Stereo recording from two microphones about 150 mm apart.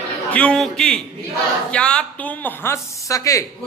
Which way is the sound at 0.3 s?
5° left (ahead or behind).